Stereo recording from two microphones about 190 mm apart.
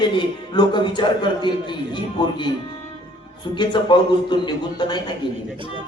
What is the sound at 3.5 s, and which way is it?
A woman's voice, 25° left (ahead or behind).